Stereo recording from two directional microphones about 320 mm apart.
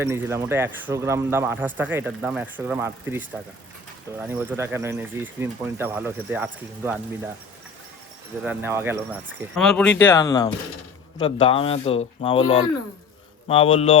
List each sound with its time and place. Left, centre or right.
0.0 s speech: centre
8.4 s speech: centre